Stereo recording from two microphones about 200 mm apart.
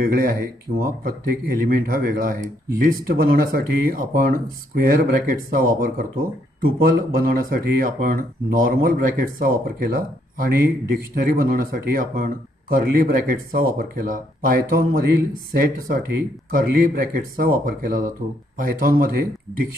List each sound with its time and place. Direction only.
0.1 s speech: 45° right (ahead or behind)